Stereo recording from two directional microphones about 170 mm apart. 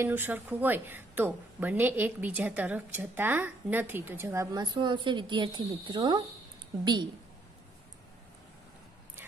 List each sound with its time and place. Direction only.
0.0 s a woman's voice: 10° right (ahead or behind)